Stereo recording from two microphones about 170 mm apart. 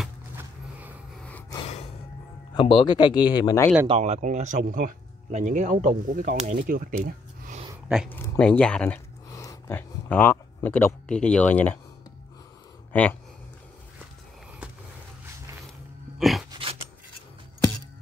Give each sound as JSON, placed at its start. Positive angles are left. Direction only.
{"t": 0.4, "sound": "music", "side_deg": -10}
{"t": 2.5, "sound": "speech", "side_deg": 25}
{"t": 3.8, "sound": "speech", "side_deg": -35}
{"t": 8.1, "sound": "speech", "side_deg": 10}
{"t": 9.3, "sound": "speech", "side_deg": 20}
{"t": 12.9, "sound": "speech", "side_deg": 10}
{"t": 16.2, "sound": "a sound", "side_deg": 0}
{"t": 16.4, "sound": "a sound", "side_deg": -30}